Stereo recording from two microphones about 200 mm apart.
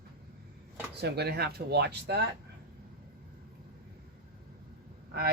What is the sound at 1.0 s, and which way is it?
Speech, 55° right (ahead or behind).